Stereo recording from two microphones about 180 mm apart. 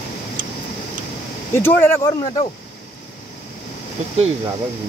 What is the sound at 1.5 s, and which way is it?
Speech, 10° left (ahead or behind).